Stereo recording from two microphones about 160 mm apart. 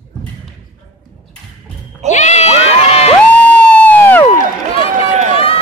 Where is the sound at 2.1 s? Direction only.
45° left (ahead or behind).